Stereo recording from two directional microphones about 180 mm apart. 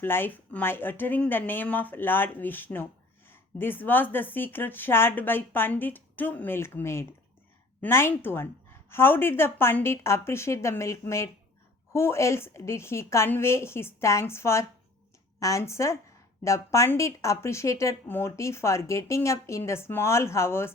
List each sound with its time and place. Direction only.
0.0 s speech: 10° left (ahead or behind)